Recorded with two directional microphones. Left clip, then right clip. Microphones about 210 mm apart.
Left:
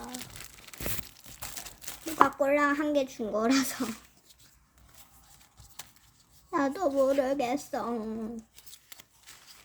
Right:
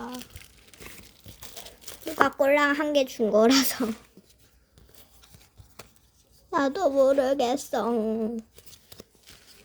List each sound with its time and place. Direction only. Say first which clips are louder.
2.2 s speech: right 4 dB; 40° right (ahead or behind)
6.5 s speech: right 4 dB; 30° right (ahead or behind)